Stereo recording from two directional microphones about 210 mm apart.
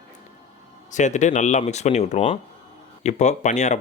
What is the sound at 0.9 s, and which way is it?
Speech, 35° left (ahead or behind).